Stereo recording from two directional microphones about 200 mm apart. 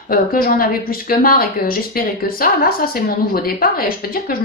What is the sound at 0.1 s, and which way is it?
Speech, 45° left (ahead or behind).